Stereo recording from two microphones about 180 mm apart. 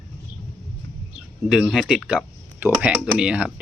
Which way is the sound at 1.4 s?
Centre (ahead or behind).